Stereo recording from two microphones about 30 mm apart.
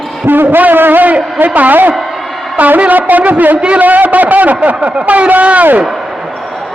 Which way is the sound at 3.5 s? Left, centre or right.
Right.